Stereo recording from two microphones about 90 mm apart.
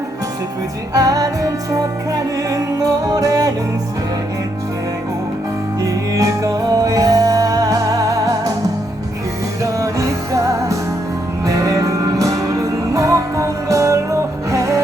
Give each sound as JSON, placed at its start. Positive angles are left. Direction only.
{"t": 0.9, "sound": "music", "side_deg": -45}
{"t": 5.8, "sound": "music", "side_deg": -40}
{"t": 9.7, "sound": "music", "side_deg": -40}